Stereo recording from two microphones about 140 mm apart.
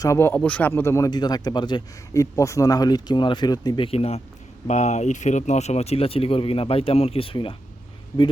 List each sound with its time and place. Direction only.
0.0 s speech: 20° left (ahead or behind)
3.8 s speech: 45° left (ahead or behind)